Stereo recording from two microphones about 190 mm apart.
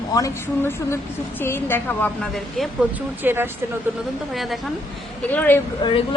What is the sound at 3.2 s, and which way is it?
Speech, 10° right (ahead or behind).